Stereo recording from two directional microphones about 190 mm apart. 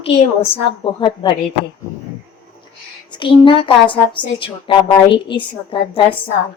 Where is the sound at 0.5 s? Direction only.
25° left (ahead or behind).